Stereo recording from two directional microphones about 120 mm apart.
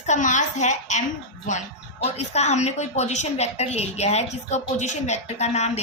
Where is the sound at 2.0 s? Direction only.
65° left (ahead or behind).